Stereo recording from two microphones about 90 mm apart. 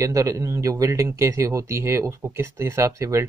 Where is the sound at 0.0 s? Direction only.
40° right (ahead or behind).